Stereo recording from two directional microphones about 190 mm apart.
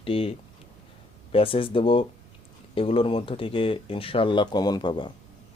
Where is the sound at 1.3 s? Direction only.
30° left (ahead or behind).